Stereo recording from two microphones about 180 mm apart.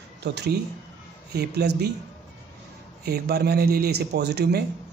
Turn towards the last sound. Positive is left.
turn(degrees=-65)  # may be behind; listen again after turning